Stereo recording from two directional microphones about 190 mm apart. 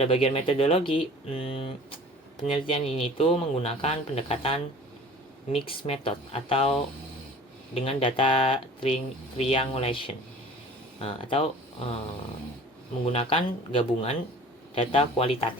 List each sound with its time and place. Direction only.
0.0 s speech: 30° left (ahead or behind)
13.1 s speech: 30° left (ahead or behind)